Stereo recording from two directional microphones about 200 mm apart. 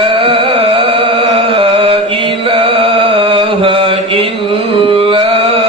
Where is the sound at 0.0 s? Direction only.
25° right (ahead or behind).